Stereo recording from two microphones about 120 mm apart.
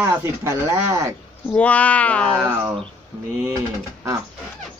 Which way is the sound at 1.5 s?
10° left (ahead or behind).